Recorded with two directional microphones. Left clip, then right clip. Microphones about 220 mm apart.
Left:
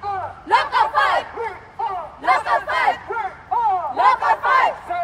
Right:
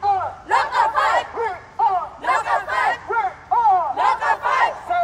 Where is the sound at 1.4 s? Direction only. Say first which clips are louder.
Right 6 dB; 15° right (ahead or behind).